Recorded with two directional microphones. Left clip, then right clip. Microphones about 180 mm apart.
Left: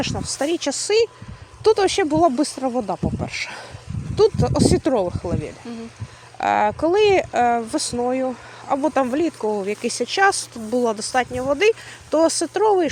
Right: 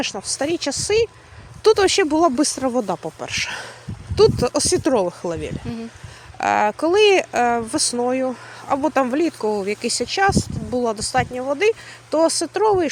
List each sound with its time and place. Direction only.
0.0 s speech: centre (ahead or behind)
1.6 s speech: 10° right (ahead or behind)
6.4 s speech: centre (ahead or behind)
12.1 s speech: centre (ahead or behind)